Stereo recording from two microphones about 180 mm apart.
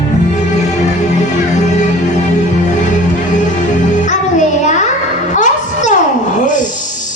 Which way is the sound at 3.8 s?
45° left (ahead or behind).